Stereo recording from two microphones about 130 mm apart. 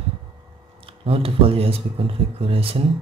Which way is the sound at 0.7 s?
45° right (ahead or behind).